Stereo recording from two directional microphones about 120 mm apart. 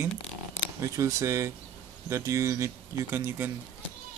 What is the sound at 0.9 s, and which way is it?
Speech, 25° right (ahead or behind).